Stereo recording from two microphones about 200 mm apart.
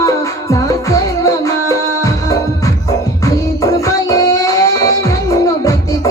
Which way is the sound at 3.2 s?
15° left (ahead or behind).